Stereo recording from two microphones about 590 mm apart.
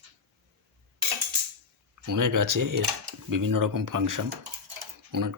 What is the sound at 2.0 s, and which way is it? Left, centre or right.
Speech, right.